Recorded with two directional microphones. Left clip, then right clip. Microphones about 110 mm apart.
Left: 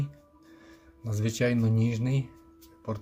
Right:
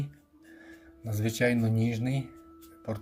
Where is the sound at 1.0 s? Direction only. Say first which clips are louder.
Right 1 dB; 35° left (ahead or behind).